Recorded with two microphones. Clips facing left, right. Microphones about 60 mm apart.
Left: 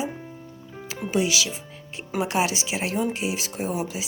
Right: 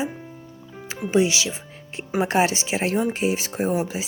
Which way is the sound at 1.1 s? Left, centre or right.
Right.